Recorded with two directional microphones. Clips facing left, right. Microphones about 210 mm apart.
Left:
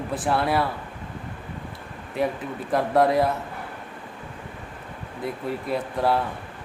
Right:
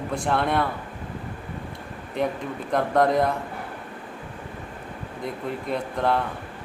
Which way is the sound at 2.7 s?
5° left (ahead or behind).